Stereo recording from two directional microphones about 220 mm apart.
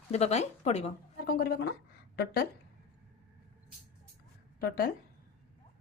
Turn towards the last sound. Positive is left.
turn(degrees=40)  # may be behind; listen again after turning